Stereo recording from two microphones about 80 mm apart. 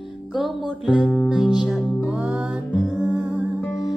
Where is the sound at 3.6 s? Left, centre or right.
Centre.